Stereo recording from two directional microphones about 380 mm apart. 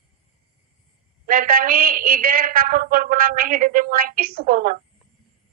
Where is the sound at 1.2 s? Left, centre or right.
Right.